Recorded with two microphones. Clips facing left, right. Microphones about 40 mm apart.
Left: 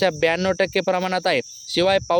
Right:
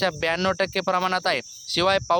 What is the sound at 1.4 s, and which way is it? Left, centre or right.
Cricket, left.